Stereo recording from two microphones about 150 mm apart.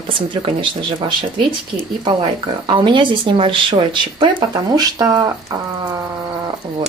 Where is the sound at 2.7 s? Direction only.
35° right (ahead or behind).